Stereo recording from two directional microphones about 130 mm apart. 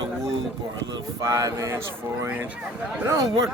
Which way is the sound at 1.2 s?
25° right (ahead or behind).